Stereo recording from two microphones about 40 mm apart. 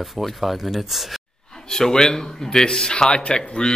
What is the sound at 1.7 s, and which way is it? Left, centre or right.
A man's voice, centre.